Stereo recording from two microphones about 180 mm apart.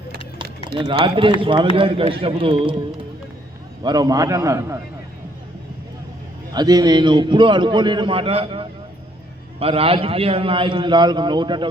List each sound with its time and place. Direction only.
0.8 s a man's voice: 30° right (ahead or behind)
3.8 s a man's voice: 20° right (ahead or behind)
6.5 s a man's voice: 20° right (ahead or behind)